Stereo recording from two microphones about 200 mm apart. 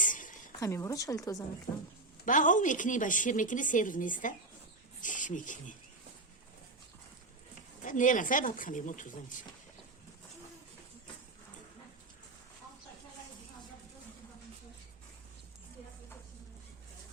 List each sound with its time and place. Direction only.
0.0 s a sound: 40° left (ahead or behind)
0.6 s speech: 15° left (ahead or behind)
2.2 s a woman's voice: 40° left (ahead or behind)
7.9 s a woman's voice: 40° left (ahead or behind)